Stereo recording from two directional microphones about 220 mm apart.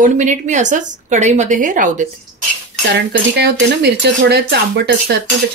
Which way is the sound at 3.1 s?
50° right (ahead or behind).